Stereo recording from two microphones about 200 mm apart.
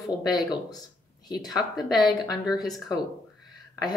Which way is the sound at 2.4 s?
Centre (ahead or behind).